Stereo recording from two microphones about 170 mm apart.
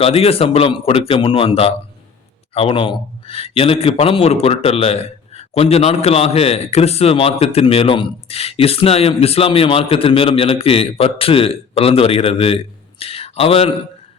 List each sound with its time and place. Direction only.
0.0 s speech: 35° left (ahead or behind)